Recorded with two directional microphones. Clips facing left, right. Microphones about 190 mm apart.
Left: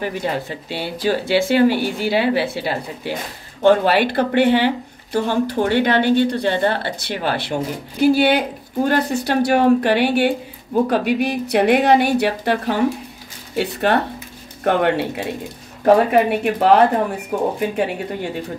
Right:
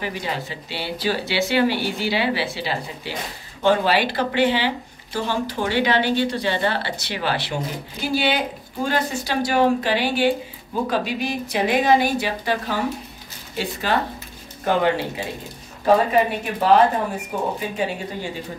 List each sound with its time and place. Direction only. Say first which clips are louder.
0.0 s speech: left 5 dB; 50° left (ahead or behind)